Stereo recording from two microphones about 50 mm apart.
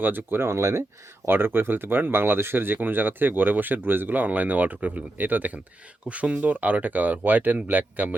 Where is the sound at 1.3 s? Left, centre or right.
Right.